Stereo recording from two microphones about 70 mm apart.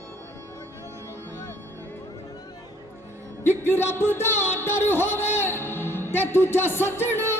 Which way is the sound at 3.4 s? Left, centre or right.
Left.